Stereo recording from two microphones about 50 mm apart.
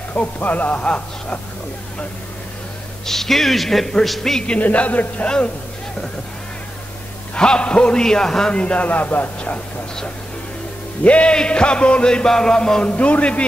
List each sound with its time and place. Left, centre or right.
0.1 s chant: left
3.1 s a man's voice: centre
4.5 s chant: left
7.3 s a man's voice: centre
8.5 s speech: left
11.1 s chant: left
12.9 s chant: left